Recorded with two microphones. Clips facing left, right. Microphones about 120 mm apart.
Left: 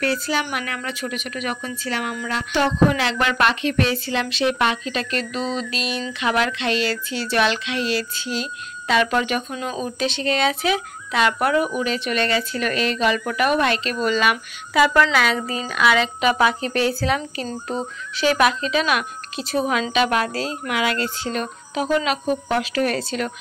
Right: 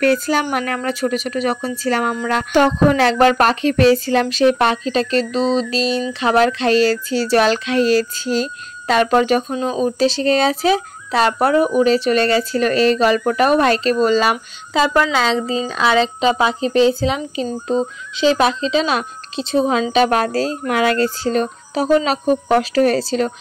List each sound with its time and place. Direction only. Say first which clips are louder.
0.0 s speech: right 7 dB; 50° right (ahead or behind)